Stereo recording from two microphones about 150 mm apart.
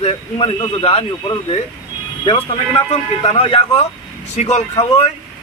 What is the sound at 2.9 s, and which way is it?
A man's voice, 40° left (ahead or behind).